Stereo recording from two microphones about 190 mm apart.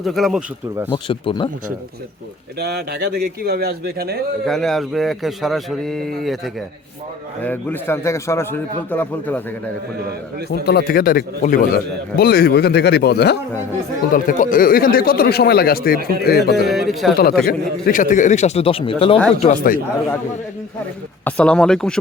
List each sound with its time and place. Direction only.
0.0 s speech: centre (ahead or behind)
0.9 s speech: 25° left (ahead or behind)
2.6 s speech: 60° right (ahead or behind)
4.4 s a man's voice: centre (ahead or behind)
10.5 s a man's voice: 55° left (ahead or behind)
14.1 s a man's voice: 45° left (ahead or behind)
16.6 s speech: centre (ahead or behind)
17.4 s a man's voice: 50° left (ahead or behind); by 19.2 s 30° left (ahead or behind)
19.4 s a man's voice: 40° left (ahead or behind)
21.2 s speech: 5° left (ahead or behind)